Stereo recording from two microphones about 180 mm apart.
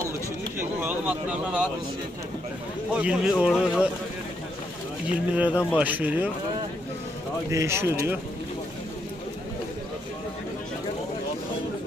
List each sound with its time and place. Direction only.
0.6 s speech: 10° right (ahead or behind)
2.9 s speech: 5° right (ahead or behind)
5.1 s speech: 5° right (ahead or behind)
7.5 s speech: 15° right (ahead or behind)